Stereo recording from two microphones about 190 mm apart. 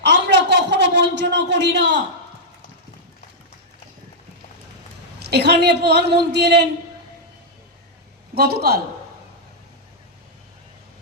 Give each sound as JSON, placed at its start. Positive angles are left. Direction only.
{"t": 0.0, "sound": "a sound", "side_deg": -65}
{"t": 5.2, "sound": "a woman's voice", "side_deg": -60}
{"t": 8.4, "sound": "a woman's voice", "side_deg": -55}